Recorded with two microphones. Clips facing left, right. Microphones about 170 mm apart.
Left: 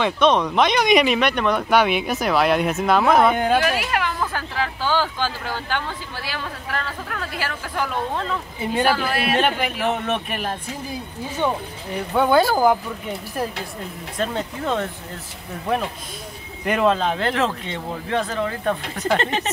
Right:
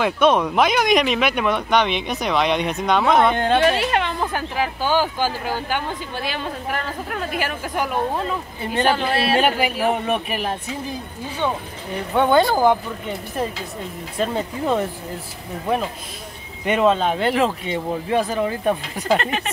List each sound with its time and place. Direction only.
0.0 s speech: 10° right (ahead or behind)
1.7 s speech: 5° left (ahead or behind)
3.5 s speech: 25° right (ahead or behind); by 8.4 s 10° right (ahead or behind)
8.8 s speech: 20° right (ahead or behind)
9.4 s speech: 5° right (ahead or behind)
12.1 s speech: 5° left (ahead or behind)
14.1 s speech: 5° right (ahead or behind)
16.6 s speech: centre (ahead or behind)
19.1 s speech: 30° left (ahead or behind)